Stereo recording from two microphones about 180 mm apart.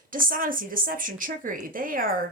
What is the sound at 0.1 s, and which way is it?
A woman's voice, 50° right (ahead or behind).